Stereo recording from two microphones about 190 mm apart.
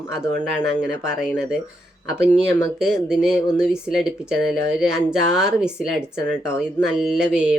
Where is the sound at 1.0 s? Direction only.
5° right (ahead or behind).